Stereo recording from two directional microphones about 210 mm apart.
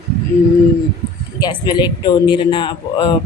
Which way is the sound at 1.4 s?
20° left (ahead or behind).